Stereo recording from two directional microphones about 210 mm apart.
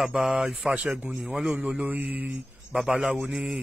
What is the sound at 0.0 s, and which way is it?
Speech, 5° right (ahead or behind).